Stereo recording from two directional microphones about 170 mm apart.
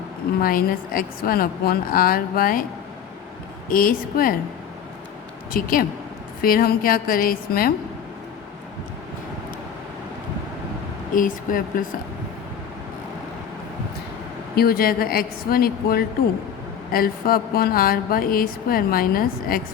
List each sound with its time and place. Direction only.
0.4 s speech: 60° left (ahead or behind)
3.7 s speech: 55° left (ahead or behind)
5.5 s speech: 55° left (ahead or behind)
11.1 s speech: 50° left (ahead or behind)
14.5 s speech: 65° left (ahead or behind)